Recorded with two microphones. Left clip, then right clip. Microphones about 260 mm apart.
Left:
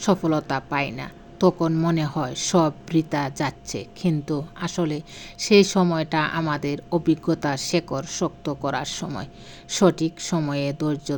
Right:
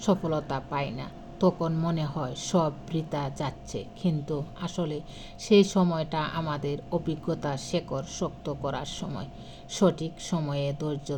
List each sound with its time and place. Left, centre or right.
0.0 s speech: left